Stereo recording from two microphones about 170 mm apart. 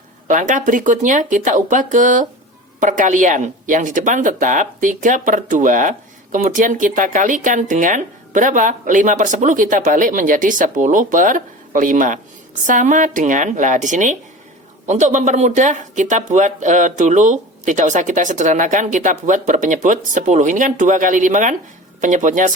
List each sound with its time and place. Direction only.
0.3 s speech: 50° right (ahead or behind)